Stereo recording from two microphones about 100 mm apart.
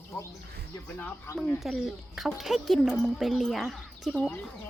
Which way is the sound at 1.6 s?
Centre (ahead or behind).